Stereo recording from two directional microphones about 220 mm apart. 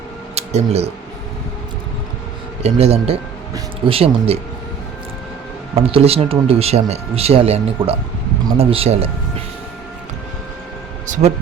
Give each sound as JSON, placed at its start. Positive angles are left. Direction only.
{"t": 0.3, "sound": "a sound", "side_deg": -30}
{"t": 2.6, "sound": "speech", "side_deg": -30}
{"t": 5.7, "sound": "speech", "side_deg": -25}
{"t": 11.0, "sound": "speech", "side_deg": -35}